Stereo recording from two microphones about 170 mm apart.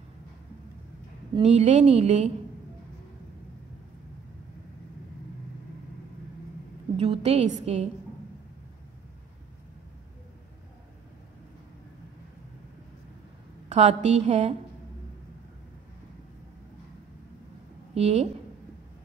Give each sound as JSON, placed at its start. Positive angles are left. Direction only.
{"t": 1.3, "sound": "a woman's voice", "side_deg": -35}
{"t": 7.0, "sound": "a woman's voice", "side_deg": -35}
{"t": 13.7, "sound": "a woman's voice", "side_deg": -40}
{"t": 17.9, "sound": "a woman's voice", "side_deg": -35}